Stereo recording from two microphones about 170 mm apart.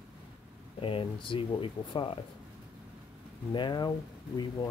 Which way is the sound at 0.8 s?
30° left (ahead or behind).